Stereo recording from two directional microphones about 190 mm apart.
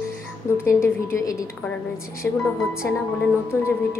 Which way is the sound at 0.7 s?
15° left (ahead or behind).